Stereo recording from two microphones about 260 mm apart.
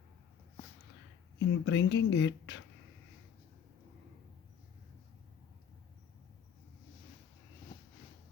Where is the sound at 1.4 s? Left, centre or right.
Left.